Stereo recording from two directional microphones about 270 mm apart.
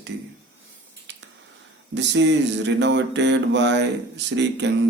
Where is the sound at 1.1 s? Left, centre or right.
Right.